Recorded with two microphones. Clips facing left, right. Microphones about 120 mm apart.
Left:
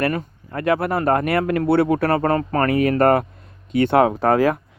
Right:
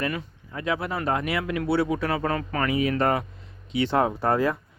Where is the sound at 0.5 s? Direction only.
60° left (ahead or behind).